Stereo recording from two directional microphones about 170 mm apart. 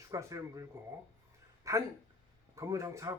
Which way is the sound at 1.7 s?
20° right (ahead or behind).